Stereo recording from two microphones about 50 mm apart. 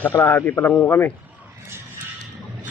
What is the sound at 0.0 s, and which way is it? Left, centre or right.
A man's voice, left.